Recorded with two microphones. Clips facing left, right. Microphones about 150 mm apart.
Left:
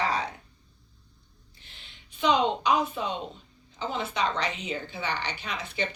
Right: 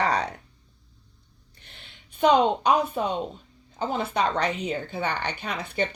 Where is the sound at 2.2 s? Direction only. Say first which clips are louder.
Right 5 dB; 50° right (ahead or behind).